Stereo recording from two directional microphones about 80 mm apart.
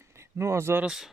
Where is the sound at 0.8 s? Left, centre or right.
Centre.